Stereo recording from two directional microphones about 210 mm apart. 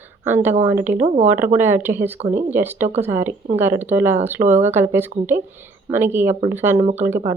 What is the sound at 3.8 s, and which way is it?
Speech, 10° right (ahead or behind).